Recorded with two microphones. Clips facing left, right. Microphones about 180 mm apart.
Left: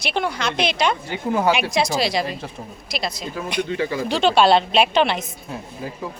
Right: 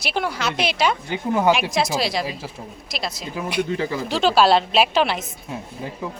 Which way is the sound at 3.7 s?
35° right (ahead or behind).